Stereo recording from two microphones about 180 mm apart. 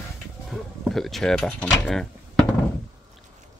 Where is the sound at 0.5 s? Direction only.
Centre (ahead or behind).